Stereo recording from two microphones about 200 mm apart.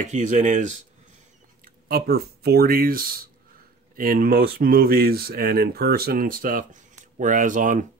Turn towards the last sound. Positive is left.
turn(degrees=-40)  # may be behind; listen again after turning